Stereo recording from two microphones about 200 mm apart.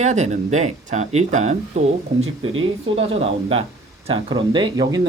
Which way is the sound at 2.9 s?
30° right (ahead or behind).